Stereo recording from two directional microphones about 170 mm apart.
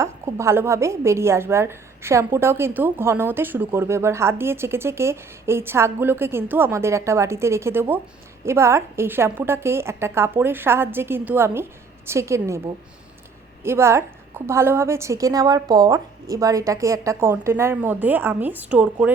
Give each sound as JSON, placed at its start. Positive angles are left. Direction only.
{"t": 0.0, "sound": "a woman's voice", "side_deg": -15}
{"t": 13.7, "sound": "a woman's voice", "side_deg": -15}